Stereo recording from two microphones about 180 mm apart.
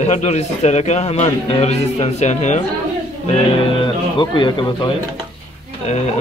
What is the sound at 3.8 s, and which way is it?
Speech, 25° left (ahead or behind).